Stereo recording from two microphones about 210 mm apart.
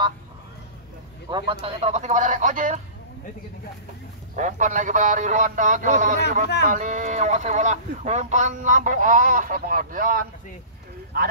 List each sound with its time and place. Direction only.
1.3 s speech: 25° right (ahead or behind)
4.4 s speech: 35° right (ahead or behind)